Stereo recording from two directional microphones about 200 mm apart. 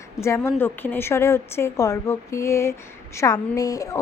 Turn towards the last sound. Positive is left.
turn(degrees=15)  # may be behind; listen again after turning